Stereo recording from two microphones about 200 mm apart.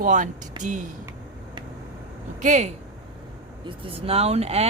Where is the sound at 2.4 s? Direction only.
35° right (ahead or behind).